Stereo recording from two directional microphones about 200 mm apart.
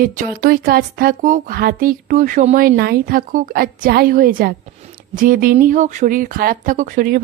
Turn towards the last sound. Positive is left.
turn(degrees=-45)  # may be behind; listen again after turning